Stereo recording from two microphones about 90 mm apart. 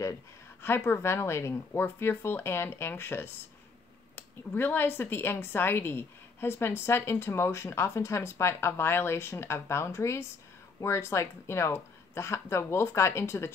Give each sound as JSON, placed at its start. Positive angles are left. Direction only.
{"t": 0.6, "sound": "speech", "side_deg": 25}